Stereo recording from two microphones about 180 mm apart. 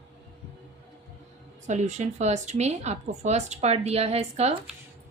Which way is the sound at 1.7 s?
40° right (ahead or behind).